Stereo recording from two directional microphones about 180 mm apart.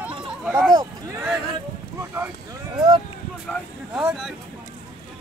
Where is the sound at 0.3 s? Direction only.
5° right (ahead or behind).